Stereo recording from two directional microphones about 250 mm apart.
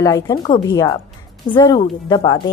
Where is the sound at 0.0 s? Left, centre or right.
Centre.